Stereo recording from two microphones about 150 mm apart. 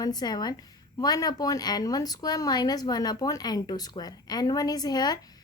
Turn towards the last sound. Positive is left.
turn(degrees=25)  # may be behind; listen again after turning